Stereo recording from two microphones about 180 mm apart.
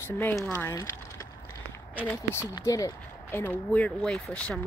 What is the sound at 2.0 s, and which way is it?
Speech, 15° left (ahead or behind).